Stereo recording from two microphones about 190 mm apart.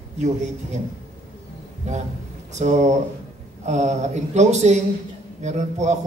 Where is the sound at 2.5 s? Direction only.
40° right (ahead or behind).